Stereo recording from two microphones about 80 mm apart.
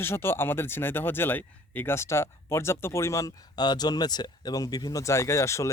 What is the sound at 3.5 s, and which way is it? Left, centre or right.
Speech, left.